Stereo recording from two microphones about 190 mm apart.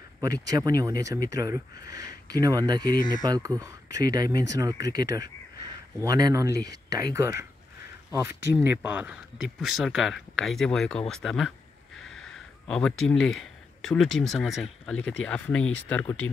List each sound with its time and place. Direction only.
0.2 s speech: 20° right (ahead or behind); by 11.5 s centre (ahead or behind)
12.2 s a sound: 5° left (ahead or behind)
13.8 s speech: 5° left (ahead or behind)